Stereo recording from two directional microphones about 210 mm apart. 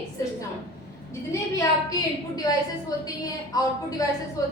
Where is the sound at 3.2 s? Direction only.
15° left (ahead or behind).